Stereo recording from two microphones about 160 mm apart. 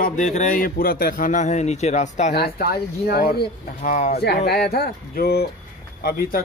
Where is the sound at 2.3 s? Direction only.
75° left (ahead or behind).